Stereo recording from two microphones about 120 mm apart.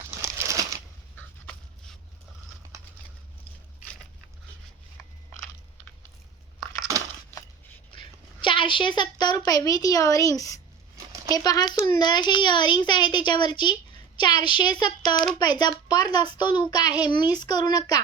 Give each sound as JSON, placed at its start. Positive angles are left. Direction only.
{"t": 0.2, "sound": "a sound", "side_deg": -25}
{"t": 1.1, "sound": "dog", "side_deg": 5}
{"t": 7.9, "sound": "a woman's voice", "side_deg": 45}
{"t": 15.1, "sound": "speech", "side_deg": 0}
{"t": 15.4, "sound": "a child's voice", "side_deg": 35}